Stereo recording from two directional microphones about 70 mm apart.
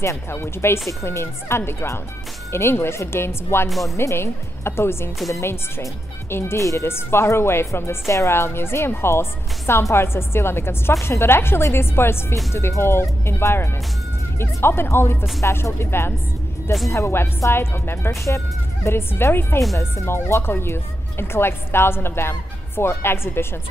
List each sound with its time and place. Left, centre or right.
0.0 s a woman's voice: left